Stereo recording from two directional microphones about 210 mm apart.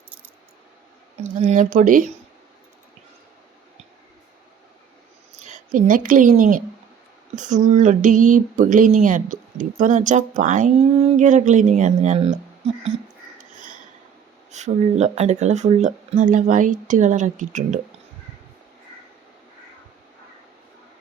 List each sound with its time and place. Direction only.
1.4 s speech: 35° right (ahead or behind)
5.5 s a woman's voice: 35° right (ahead or behind)
13.4 s a sound: 40° right (ahead or behind)
14.5 s speech: 35° right (ahead or behind)